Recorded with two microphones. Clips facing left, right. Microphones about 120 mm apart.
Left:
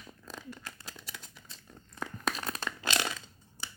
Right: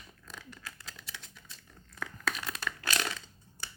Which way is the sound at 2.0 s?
30° left (ahead or behind).